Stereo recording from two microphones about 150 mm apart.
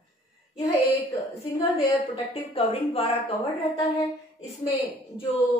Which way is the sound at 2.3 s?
40° left (ahead or behind).